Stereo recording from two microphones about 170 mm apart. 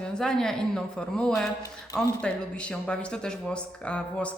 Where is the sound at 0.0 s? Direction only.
5° left (ahead or behind).